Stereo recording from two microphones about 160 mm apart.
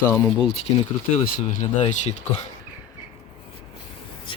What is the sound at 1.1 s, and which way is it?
Speech, 45° left (ahead or behind).